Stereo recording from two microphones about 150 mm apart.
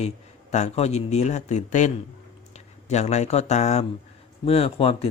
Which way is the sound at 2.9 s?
50° left (ahead or behind).